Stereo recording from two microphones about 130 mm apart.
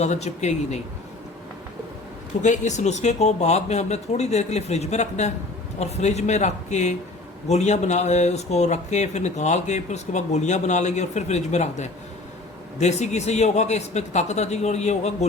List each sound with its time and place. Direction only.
0.0 s speech: 60° left (ahead or behind)
2.4 s speech: 65° left (ahead or behind)